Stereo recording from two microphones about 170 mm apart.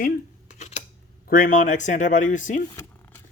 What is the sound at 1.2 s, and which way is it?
Speech, 50° left (ahead or behind).